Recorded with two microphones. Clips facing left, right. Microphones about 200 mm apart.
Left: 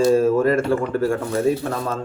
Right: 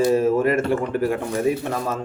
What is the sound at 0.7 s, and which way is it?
Speech, 20° right (ahead or behind).